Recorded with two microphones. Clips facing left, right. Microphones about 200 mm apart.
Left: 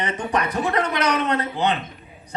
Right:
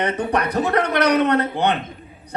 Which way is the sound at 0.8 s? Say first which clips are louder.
Right 6 dB; 60° right (ahead or behind).